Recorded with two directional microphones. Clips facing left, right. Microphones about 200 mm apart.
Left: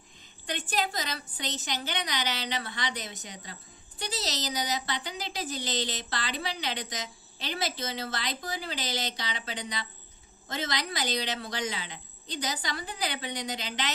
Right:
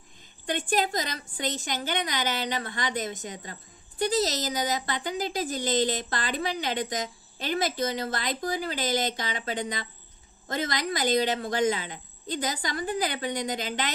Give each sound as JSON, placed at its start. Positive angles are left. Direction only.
{"t": 0.7, "sound": "a woman's voice", "side_deg": -45}